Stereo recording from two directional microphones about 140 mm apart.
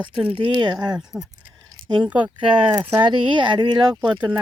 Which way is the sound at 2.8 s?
20° right (ahead or behind).